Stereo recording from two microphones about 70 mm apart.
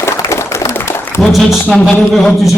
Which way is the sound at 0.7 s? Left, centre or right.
Left.